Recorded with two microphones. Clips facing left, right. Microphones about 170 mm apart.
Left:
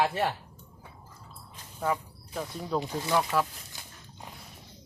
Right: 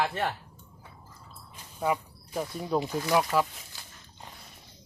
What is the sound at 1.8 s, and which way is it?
Speech, 10° right (ahead or behind).